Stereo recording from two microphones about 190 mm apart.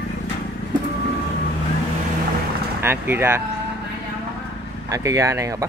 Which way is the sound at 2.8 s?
10° right (ahead or behind).